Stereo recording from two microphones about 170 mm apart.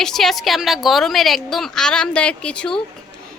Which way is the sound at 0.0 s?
Centre (ahead or behind).